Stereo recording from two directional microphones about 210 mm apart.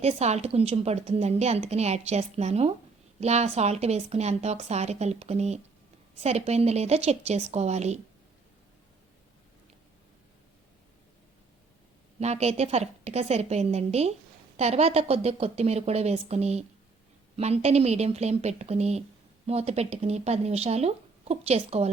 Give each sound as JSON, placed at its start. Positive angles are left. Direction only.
{"t": 0.0, "sound": "a woman's voice", "side_deg": -30}
{"t": 12.2, "sound": "a woman's voice", "side_deg": -30}